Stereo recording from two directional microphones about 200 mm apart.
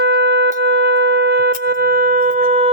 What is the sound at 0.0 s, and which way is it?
Shofar, 55° right (ahead or behind).